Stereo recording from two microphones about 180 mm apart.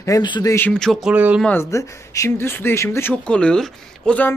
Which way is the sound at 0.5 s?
5° left (ahead or behind).